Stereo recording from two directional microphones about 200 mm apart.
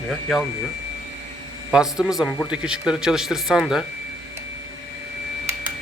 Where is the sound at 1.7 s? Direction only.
5° right (ahead or behind).